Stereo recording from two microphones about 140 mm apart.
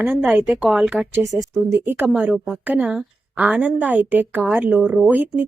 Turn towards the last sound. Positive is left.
turn(degrees=-10)  # may be behind; listen again after turning